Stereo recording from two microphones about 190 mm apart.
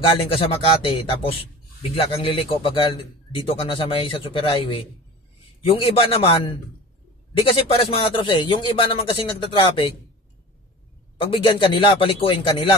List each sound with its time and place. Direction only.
0.0 s a man's voice: 30° left (ahead or behind)
7.5 s a man's voice: 30° left (ahead or behind)
11.1 s a man's voice: 25° left (ahead or behind)